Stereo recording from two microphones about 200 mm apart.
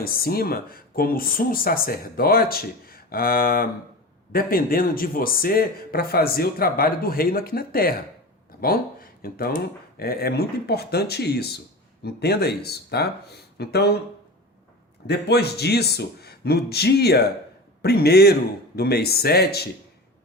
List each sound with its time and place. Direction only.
0.0 s speech: 50° left (ahead or behind)
15.0 s speech: 55° left (ahead or behind)